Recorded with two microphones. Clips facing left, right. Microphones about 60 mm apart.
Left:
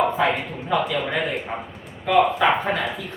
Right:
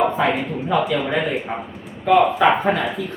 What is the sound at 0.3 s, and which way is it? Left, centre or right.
Speech, centre.